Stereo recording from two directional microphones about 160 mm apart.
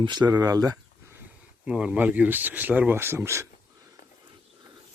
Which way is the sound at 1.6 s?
5° right (ahead or behind).